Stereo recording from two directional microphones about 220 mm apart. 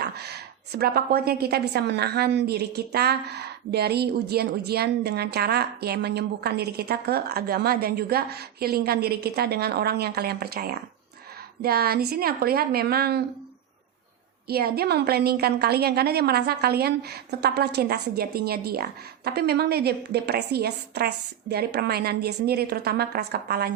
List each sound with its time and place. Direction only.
0.0 s a woman's voice: 45° right (ahead or behind)
14.4 s a woman's voice: 45° right (ahead or behind)